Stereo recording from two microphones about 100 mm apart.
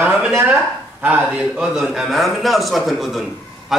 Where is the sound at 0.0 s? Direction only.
20° right (ahead or behind).